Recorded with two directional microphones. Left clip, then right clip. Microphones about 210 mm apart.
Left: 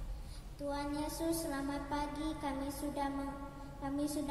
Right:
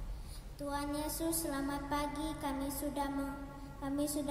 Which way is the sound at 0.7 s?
50° right (ahead or behind).